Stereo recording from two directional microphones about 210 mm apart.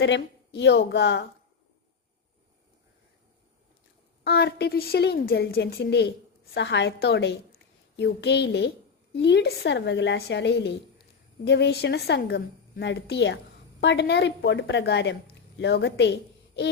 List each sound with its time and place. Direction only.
0.0 s a woman's voice: 60° left (ahead or behind)
4.2 s a woman's voice: 50° left (ahead or behind)